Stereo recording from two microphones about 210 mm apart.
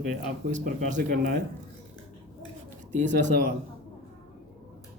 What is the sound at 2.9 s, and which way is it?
Speech, 35° right (ahead or behind).